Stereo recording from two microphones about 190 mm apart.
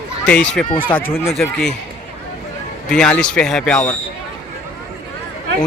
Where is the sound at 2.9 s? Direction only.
5° left (ahead or behind).